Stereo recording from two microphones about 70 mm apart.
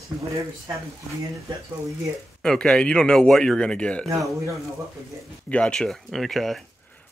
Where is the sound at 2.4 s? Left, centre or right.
Centre.